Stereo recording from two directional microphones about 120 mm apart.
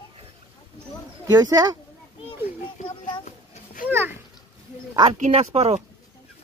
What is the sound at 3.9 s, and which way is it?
Speech, 15° right (ahead or behind).